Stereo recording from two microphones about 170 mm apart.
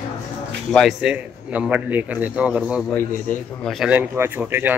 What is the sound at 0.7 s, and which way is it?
A man's voice, centre (ahead or behind).